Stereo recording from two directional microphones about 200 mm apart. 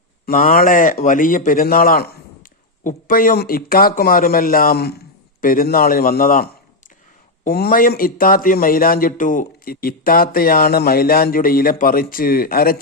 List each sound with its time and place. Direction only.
0.3 s a man's voice: 45° left (ahead or behind)